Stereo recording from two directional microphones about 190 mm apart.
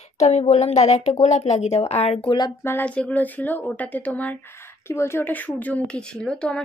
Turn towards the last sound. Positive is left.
turn(degrees=5)  # may be behind; listen again after turning